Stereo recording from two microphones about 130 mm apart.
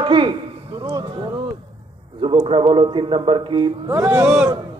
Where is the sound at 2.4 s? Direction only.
45° right (ahead or behind).